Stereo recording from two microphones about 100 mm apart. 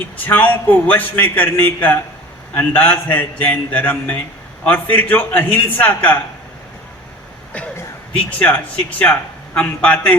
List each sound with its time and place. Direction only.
0.2 s a man's voice: 20° left (ahead or behind)
8.1 s a man's voice: 15° left (ahead or behind)